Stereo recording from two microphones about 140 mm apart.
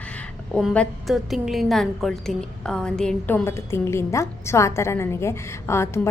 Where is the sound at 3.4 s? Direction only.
20° left (ahead or behind).